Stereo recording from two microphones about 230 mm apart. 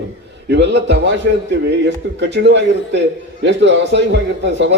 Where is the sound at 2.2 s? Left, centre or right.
Right.